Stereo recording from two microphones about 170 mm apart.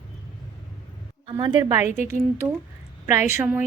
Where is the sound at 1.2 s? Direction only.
25° right (ahead or behind).